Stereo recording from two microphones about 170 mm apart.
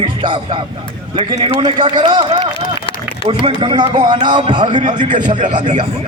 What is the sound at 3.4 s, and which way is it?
Music, 30° right (ahead or behind).